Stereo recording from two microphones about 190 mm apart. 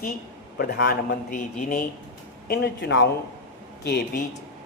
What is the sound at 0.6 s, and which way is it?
A man's voice, 55° left (ahead or behind).